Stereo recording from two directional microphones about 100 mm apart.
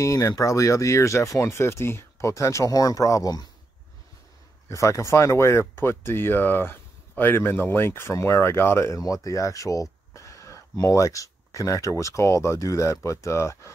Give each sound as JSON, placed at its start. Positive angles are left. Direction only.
{"t": 0.0, "sound": "speech", "side_deg": 35}
{"t": 4.6, "sound": "speech", "side_deg": 30}